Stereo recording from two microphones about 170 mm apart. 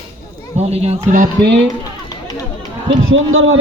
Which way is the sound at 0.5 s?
40° right (ahead or behind).